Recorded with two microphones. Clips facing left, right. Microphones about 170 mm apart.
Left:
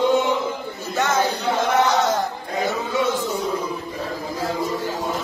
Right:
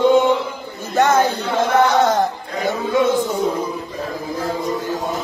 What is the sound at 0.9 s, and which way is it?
Speech, 55° right (ahead or behind).